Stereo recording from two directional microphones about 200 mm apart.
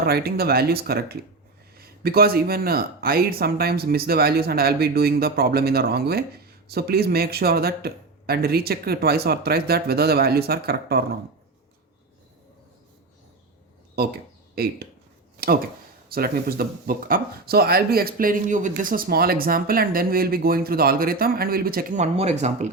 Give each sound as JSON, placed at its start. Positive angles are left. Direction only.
{"t": 0.0, "sound": "speech", "side_deg": -50}
{"t": 14.5, "sound": "speech", "side_deg": -50}
{"t": 16.1, "sound": "speech", "side_deg": -50}